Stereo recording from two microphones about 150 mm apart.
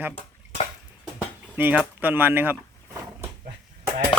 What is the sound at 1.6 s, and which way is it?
Speech, 10° right (ahead or behind).